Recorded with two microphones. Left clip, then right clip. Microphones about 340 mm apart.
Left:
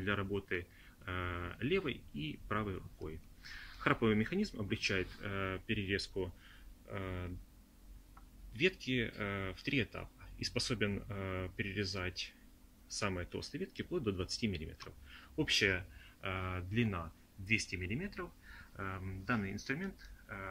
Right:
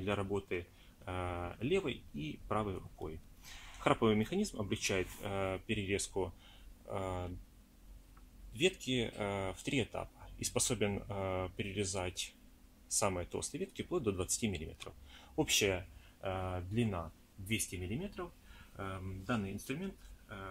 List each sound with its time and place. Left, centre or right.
0.0 s speech: centre
8.5 s speech: centre
18.8 s speech: centre